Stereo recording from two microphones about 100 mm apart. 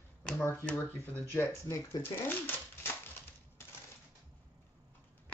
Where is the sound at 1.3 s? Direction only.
25° left (ahead or behind).